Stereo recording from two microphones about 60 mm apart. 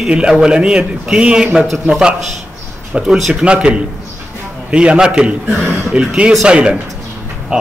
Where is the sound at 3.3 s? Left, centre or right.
Centre.